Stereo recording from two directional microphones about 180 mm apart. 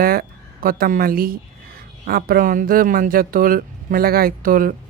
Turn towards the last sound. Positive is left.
turn(degrees=-50)  # may be behind; listen again after turning